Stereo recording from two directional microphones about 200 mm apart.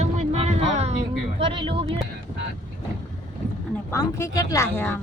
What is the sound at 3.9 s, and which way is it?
A woman's voice, 15° left (ahead or behind).